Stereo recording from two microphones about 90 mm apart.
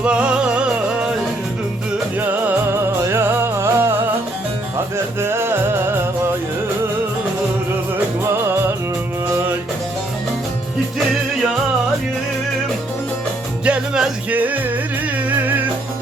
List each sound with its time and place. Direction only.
0.0 s music: 10° right (ahead or behind)
2.2 s music: 20° right (ahead or behind)
5.2 s music: 25° right (ahead or behind)
7.9 s music: 30° right (ahead or behind)
13.7 s music: 10° right (ahead or behind)